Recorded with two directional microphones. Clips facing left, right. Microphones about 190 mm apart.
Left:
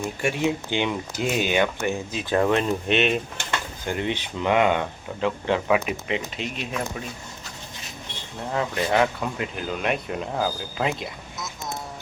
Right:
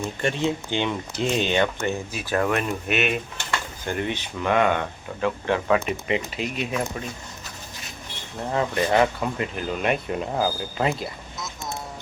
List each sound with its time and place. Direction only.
0.2 s speech: 10° left (ahead or behind)
2.1 s speech: 20° left (ahead or behind); by 7.0 s centre (ahead or behind)
8.5 s speech: centre (ahead or behind)